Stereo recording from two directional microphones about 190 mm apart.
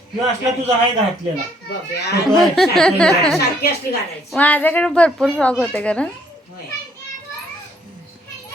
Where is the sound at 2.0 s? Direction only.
60° left (ahead or behind).